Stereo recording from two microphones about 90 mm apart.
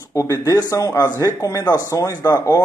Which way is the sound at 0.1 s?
35° left (ahead or behind).